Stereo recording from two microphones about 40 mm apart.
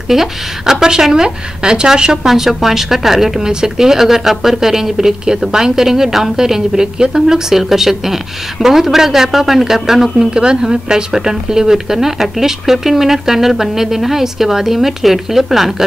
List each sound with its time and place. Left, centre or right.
0.1 s a woman's voice: centre
2.2 s a woman's voice: centre
10.3 s a woman's voice: centre